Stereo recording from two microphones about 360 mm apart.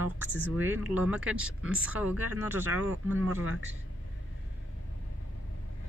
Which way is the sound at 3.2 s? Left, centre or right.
Right.